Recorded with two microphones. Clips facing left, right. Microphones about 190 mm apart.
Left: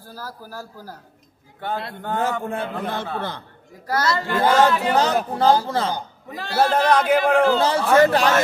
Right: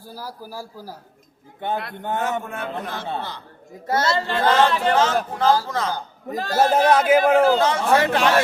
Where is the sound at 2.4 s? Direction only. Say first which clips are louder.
Left 4 dB; 30° left (ahead or behind).